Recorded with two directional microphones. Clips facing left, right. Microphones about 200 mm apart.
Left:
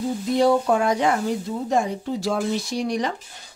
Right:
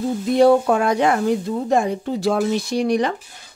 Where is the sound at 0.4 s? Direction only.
60° right (ahead or behind).